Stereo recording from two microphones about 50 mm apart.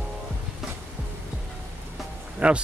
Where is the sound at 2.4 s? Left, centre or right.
Right.